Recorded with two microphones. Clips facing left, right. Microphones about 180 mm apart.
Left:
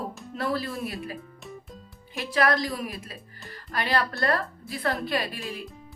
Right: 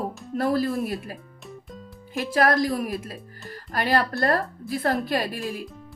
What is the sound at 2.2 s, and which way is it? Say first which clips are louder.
A woman's voice: right 3 dB; 45° right (ahead or behind).